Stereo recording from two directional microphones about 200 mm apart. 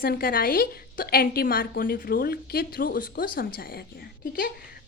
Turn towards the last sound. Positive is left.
turn(degrees=45)  # may be behind; listen again after turning